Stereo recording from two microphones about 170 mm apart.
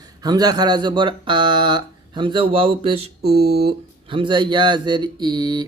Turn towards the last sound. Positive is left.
turn(degrees=-25)  # may be behind; listen again after turning